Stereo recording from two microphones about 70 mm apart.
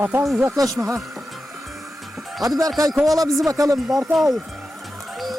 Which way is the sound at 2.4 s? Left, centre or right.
Right.